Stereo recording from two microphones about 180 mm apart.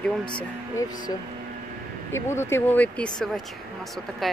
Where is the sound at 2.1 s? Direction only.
15° left (ahead or behind).